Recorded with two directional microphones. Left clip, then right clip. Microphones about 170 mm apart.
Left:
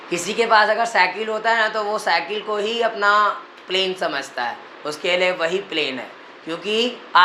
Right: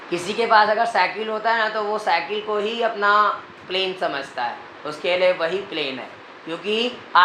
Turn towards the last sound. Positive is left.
turn(degrees=40)  # may be behind; listen again after turning